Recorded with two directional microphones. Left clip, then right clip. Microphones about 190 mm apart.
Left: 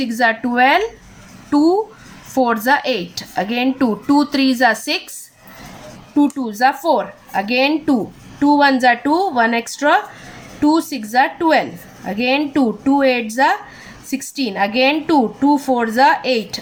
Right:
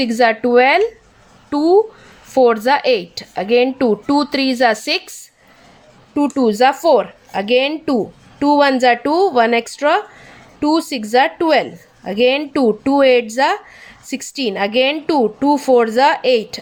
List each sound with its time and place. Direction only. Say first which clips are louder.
0.0 s a woman's voice: right 3 dB; 30° right (ahead or behind)
6.1 s a woman's voice: right 3 dB; 35° right (ahead or behind)